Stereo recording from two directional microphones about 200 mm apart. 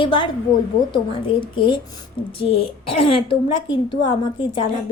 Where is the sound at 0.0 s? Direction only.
25° left (ahead or behind).